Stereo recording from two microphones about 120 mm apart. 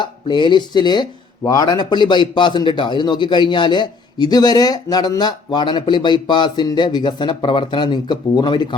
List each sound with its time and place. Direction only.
0.0 s a man's voice: 40° left (ahead or behind)